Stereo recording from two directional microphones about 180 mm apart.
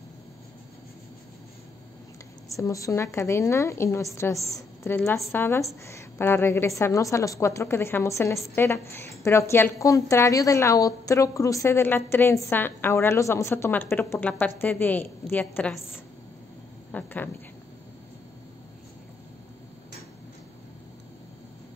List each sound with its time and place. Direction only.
2.5 s a woman's voice: 15° left (ahead or behind)
16.9 s a woman's voice: 10° left (ahead or behind)